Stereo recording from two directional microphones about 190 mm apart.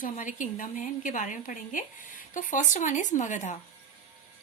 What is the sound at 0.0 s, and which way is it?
A woman's voice, 40° left (ahead or behind).